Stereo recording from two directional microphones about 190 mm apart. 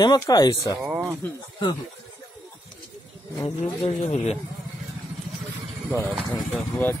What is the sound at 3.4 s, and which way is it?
Speech, 30° left (ahead or behind).